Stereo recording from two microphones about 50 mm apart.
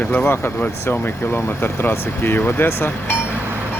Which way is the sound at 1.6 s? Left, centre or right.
Left.